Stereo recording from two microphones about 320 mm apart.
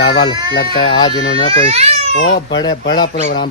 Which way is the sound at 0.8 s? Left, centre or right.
Centre.